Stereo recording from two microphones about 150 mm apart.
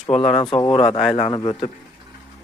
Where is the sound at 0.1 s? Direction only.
40° left (ahead or behind).